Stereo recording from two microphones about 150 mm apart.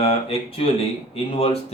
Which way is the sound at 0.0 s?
40° left (ahead or behind).